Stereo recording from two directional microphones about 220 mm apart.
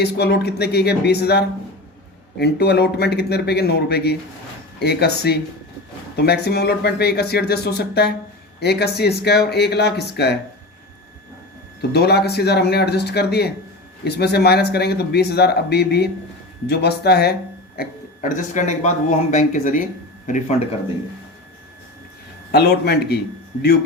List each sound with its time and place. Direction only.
0.0 s speech: 50° left (ahead or behind)
11.8 s speech: 45° left (ahead or behind)
22.5 s speech: 45° left (ahead or behind)